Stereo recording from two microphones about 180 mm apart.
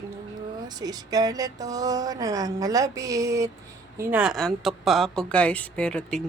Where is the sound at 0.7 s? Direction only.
20° right (ahead or behind).